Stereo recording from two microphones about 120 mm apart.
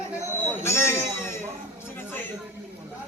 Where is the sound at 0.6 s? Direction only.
20° left (ahead or behind).